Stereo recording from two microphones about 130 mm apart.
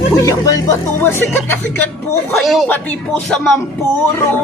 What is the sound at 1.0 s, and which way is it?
Speech, 15° left (ahead or behind).